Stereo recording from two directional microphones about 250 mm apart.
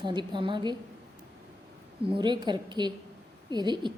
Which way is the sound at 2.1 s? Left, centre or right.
Centre.